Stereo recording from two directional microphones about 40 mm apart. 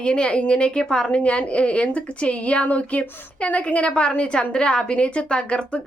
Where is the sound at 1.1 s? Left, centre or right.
Left.